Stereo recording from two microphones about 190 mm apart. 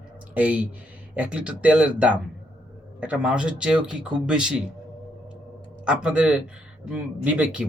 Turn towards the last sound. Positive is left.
turn(degrees=-5)  # may be behind; listen again after turning